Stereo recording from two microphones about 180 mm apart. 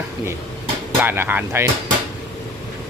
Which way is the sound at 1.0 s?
10° right (ahead or behind).